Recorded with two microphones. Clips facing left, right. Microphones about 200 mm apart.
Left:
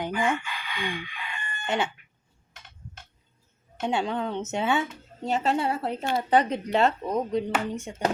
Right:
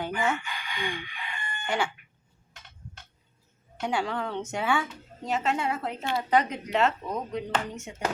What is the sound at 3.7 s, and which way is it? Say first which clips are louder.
A woman's voice: left 2 dB; 25° left (ahead or behind).